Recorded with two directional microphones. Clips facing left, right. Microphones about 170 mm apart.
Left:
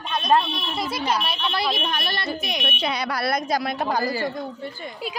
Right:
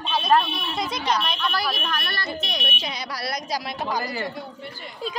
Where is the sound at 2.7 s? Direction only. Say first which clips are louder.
Left 6 dB; 60° left (ahead or behind).